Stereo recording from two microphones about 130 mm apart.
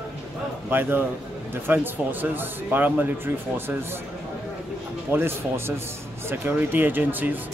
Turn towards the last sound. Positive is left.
turn(degrees=-15)  # may be behind; listen again after turning